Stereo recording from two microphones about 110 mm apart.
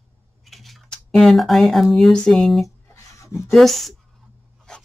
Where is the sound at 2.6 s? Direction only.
30° left (ahead or behind).